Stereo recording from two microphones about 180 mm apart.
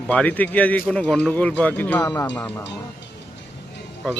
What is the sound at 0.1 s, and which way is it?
A man's voice, 10° left (ahead or behind).